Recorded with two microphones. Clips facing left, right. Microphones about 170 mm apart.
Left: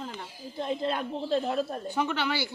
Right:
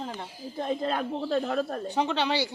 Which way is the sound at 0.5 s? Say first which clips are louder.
Right 1 dB; 50° right (ahead or behind).